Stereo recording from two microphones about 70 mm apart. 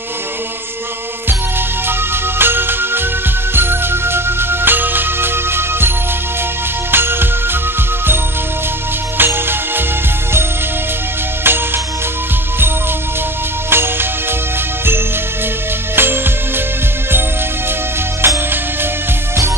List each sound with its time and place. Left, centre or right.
1.9 s music: right
9.2 s music: right
11.4 s music: right
13.7 s music: right
16.0 s music: right
18.2 s music: right